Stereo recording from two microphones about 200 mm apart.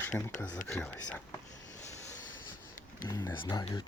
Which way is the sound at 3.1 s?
15° left (ahead or behind).